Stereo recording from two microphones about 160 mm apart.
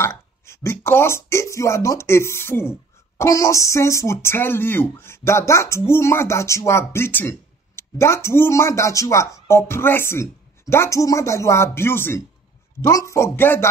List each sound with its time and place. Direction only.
0.0 s speech: 15° left (ahead or behind)